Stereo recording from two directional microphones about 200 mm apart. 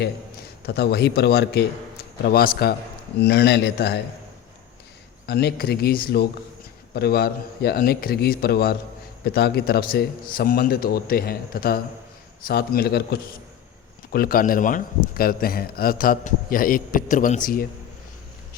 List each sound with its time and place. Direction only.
0.6 s a man's voice: 55° left (ahead or behind)
5.2 s a man's voice: 55° left (ahead or behind)